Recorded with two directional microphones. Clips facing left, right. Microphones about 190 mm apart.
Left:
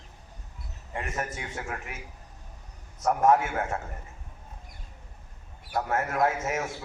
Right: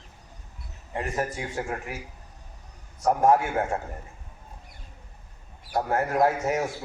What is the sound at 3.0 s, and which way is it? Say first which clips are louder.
Speech: right 2 dB; 30° right (ahead or behind).